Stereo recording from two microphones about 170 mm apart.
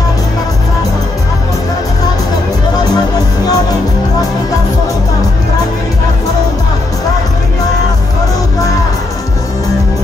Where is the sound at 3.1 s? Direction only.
20° left (ahead or behind).